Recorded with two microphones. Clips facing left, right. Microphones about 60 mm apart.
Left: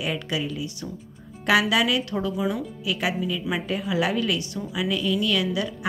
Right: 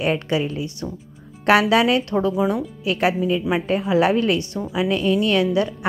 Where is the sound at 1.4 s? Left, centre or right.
Right.